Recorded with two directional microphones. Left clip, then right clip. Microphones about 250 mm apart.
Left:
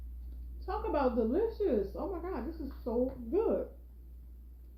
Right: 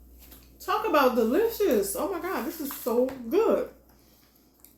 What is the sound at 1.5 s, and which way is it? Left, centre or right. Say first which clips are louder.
Speech: right 7 dB; centre.